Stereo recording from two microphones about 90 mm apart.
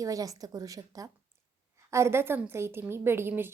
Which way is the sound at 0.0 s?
40° right (ahead or behind).